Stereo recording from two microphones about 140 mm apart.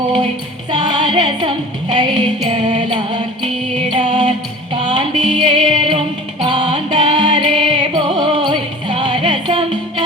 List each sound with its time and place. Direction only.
0.7 s music: 30° right (ahead or behind)